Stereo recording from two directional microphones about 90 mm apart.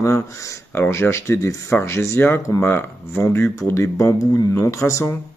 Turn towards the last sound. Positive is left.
turn(degrees=35)  # may be behind; listen again after turning